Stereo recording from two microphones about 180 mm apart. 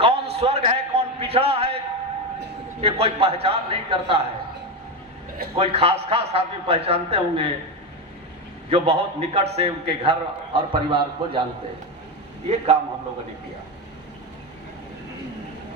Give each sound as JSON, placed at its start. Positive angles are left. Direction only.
{"t": 0.0, "sound": "a man's voice", "side_deg": -35}
{"t": 2.8, "sound": "a man's voice", "side_deg": -35}
{"t": 5.5, "sound": "a man's voice", "side_deg": -35}
{"t": 8.7, "sound": "a man's voice", "side_deg": -35}
{"t": 12.5, "sound": "a man's voice", "side_deg": -35}